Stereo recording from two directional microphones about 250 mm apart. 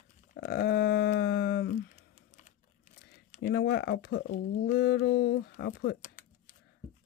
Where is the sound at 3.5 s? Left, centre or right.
Left.